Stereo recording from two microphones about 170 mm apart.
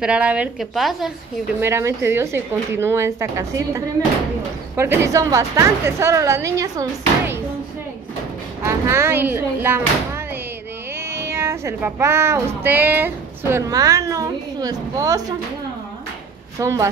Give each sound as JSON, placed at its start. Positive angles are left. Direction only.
{"t": 0.0, "sound": "a woman's voice", "side_deg": -5}
{"t": 1.6, "sound": "a woman's voice", "side_deg": -15}
{"t": 8.6, "sound": "a woman's voice", "side_deg": -15}
{"t": 16.5, "sound": "a woman's voice", "side_deg": -20}